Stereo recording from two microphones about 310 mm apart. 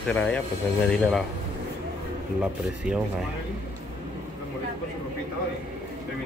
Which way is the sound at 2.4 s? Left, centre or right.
Centre.